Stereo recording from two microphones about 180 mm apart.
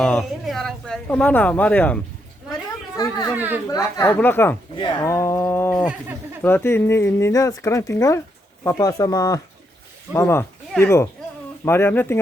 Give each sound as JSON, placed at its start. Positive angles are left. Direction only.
{"t": 0.0, "sound": "speech", "side_deg": 0}
{"t": 2.9, "sound": "speech", "side_deg": 20}
{"t": 3.3, "sound": "a woman's voice", "side_deg": -10}
{"t": 3.7, "sound": "speech", "side_deg": 20}
{"t": 4.8, "sound": "speech", "side_deg": 25}